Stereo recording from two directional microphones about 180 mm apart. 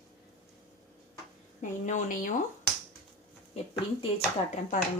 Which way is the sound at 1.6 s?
45° left (ahead or behind).